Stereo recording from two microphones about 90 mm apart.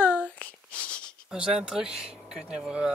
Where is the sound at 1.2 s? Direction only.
5° right (ahead or behind).